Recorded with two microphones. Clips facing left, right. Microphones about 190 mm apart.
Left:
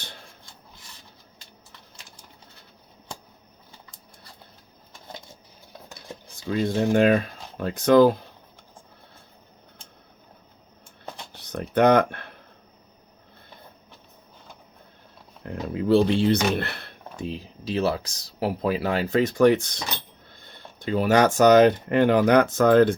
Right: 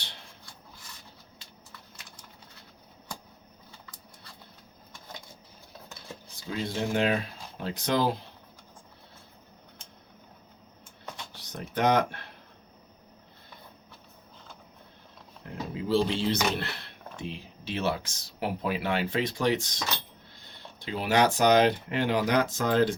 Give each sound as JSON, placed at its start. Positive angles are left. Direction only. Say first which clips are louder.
{"t": 6.6, "sound": "speech", "louder": "left 8 dB", "side_deg": 50}
{"t": 11.5, "sound": "speech", "louder": "left 7 dB", "side_deg": 60}
{"t": 15.7, "sound": "speech", "louder": "left 7 dB", "side_deg": 60}
{"t": 17.2, "sound": "speech", "louder": "left 6 dB", "side_deg": 40}